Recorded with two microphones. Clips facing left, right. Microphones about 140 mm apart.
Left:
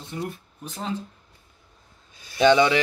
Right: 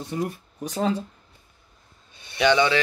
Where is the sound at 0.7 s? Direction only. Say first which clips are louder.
Right 6 dB; 75° right (ahead or behind).